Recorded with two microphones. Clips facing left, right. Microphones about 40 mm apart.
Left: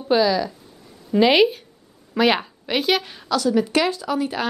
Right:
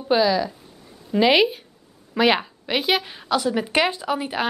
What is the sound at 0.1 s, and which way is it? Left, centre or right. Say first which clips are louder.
A woman's voice: left 1 dB; centre.